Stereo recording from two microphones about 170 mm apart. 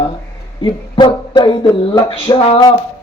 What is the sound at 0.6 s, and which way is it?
Dog, 25° left (ahead or behind).